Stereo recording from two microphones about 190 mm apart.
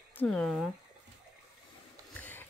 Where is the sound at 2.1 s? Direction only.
10° left (ahead or behind).